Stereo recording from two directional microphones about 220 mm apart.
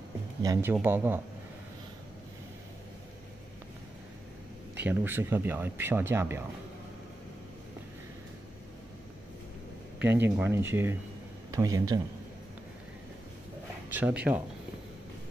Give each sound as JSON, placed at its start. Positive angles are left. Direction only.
{"t": 0.4, "sound": "speech", "side_deg": -15}
{"t": 4.8, "sound": "speech", "side_deg": -10}
{"t": 10.0, "sound": "speech", "side_deg": -10}
{"t": 13.8, "sound": "speech", "side_deg": -10}